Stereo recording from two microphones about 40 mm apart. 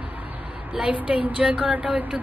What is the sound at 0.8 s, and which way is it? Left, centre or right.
A woman's voice, right.